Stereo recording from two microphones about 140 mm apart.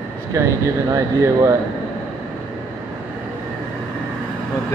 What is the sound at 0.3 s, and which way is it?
Speech, 20° right (ahead or behind).